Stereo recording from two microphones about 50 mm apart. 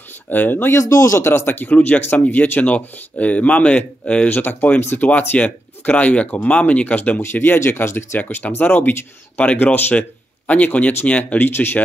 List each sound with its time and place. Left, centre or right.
0.3 s speech: left
0.7 s speech: left
1.2 s speech: left
4.3 s speech: left
7.5 s speech: left
8.2 s a man's voice: left
11.3 s speech: left